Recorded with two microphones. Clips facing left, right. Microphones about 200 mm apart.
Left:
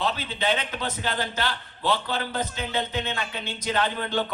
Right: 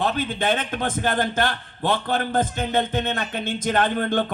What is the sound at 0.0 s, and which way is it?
A man's voice, 50° right (ahead or behind).